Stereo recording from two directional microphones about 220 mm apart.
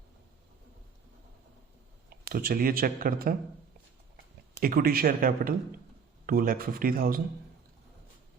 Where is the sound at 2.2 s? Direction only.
40° right (ahead or behind).